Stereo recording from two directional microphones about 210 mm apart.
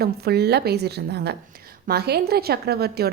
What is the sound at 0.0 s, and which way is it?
A woman's voice, 50° right (ahead or behind).